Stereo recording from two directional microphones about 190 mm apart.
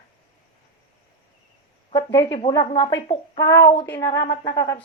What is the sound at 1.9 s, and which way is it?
Speech, 20° left (ahead or behind).